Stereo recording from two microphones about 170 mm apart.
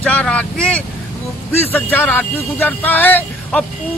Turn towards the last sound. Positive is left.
turn(degrees=10)  # may be behind; listen again after turning